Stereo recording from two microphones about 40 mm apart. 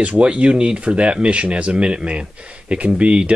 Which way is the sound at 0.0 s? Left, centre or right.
Right.